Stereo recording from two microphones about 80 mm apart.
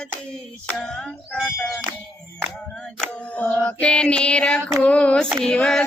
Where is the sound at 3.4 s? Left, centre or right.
Centre.